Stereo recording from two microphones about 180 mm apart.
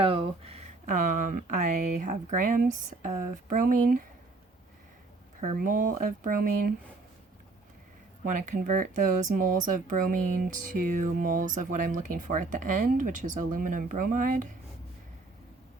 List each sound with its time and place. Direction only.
0.0 s speech: 30° right (ahead or behind); by 4.0 s 50° right (ahead or behind)
5.4 s speech: 45° right (ahead or behind)
8.2 s speech: 45° right (ahead or behind)